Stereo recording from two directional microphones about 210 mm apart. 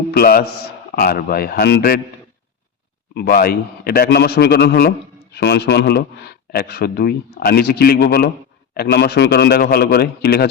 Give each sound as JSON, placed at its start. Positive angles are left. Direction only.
{"t": 0.1, "sound": "a man's voice", "side_deg": 45}
{"t": 3.2, "sound": "speech", "side_deg": 45}